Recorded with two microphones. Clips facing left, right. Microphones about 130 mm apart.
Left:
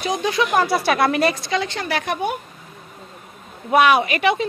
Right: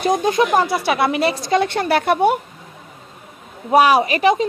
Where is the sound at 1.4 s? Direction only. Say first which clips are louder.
Right 6 dB; 55° right (ahead or behind).